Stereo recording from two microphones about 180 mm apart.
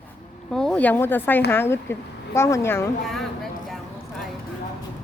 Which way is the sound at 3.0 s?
Centre (ahead or behind).